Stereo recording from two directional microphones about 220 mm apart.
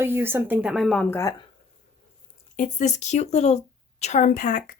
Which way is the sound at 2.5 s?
35° left (ahead or behind).